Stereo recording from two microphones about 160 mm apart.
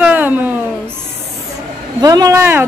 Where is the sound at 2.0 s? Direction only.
25° right (ahead or behind).